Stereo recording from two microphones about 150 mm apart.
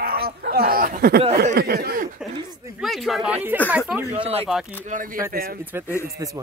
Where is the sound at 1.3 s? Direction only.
90° right.